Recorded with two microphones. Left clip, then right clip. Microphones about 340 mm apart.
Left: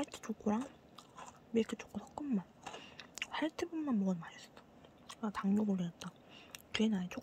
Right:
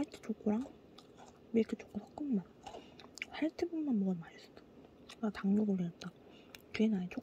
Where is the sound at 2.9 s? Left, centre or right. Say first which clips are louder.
Left 4 dB; centre.